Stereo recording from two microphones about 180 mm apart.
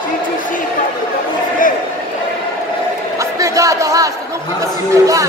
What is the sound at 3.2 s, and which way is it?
Crowd, 20° right (ahead or behind).